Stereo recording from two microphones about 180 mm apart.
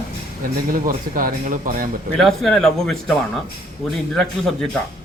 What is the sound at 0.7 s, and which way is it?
Speech, 50° right (ahead or behind).